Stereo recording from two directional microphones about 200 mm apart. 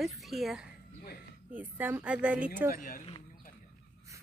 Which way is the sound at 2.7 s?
45° left (ahead or behind).